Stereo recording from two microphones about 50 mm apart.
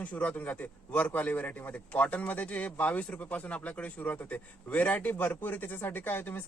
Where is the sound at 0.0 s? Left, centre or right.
Left.